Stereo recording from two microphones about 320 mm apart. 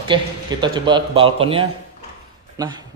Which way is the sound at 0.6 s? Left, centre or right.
Centre.